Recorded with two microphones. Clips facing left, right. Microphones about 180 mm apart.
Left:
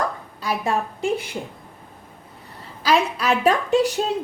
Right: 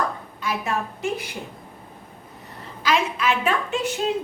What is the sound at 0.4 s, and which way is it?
Speech, 35° left (ahead or behind).